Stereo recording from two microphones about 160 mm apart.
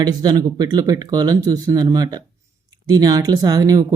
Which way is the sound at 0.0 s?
25° right (ahead or behind).